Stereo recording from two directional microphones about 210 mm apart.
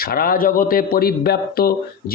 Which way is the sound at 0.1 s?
45° left (ahead or behind).